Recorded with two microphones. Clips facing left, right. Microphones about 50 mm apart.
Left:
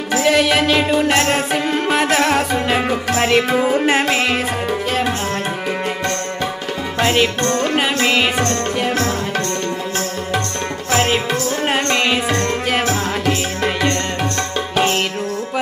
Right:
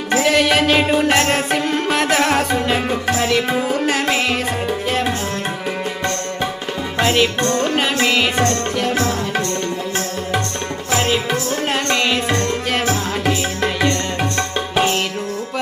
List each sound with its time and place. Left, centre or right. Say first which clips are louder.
0.2 s music: left 1 dB; centre
0.7 s music: even; centre
3.2 s music: left 5 dB; left
4.9 s tabla: even; centre
7.0 s music: even; centre
10.9 s music: left 1 dB; left
13.8 s music: even; centre